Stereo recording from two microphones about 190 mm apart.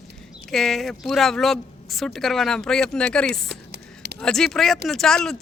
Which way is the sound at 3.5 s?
60° right (ahead or behind).